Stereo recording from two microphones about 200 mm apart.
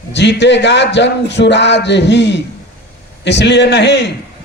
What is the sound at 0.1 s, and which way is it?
A man's voice, 60° left (ahead or behind).